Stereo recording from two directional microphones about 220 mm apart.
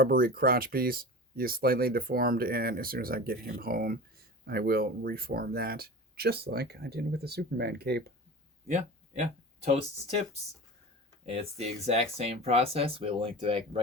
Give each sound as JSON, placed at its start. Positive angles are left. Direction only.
{"t": 0.0, "sound": "speech", "side_deg": -40}
{"t": 8.6, "sound": "a sound", "side_deg": -30}
{"t": 9.6, "sound": "speech", "side_deg": -30}